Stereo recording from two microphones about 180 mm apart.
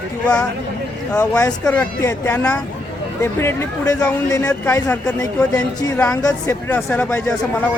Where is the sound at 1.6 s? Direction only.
10° left (ahead or behind).